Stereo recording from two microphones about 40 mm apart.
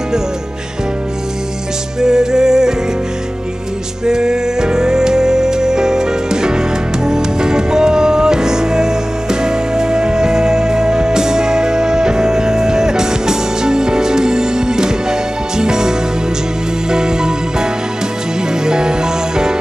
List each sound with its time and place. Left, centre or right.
2.0 s music: centre
4.0 s music: centre
16.9 s music: centre
18.7 s music: centre